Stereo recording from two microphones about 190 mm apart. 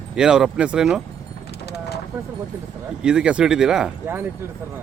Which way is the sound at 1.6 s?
60° left (ahead or behind).